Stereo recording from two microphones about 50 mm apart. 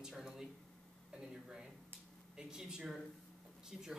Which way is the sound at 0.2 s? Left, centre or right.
Centre.